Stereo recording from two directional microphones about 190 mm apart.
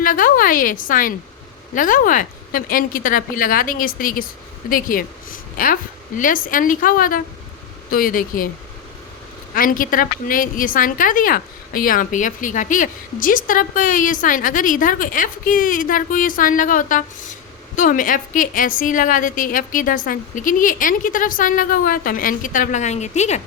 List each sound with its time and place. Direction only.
0.0 s a woman's voice: 45° left (ahead or behind)
9.6 s a woman's voice: 45° left (ahead or behind)